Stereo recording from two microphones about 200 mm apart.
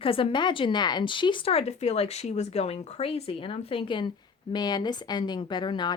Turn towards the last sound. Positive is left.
turn(degrees=20)  # may be behind; listen again after turning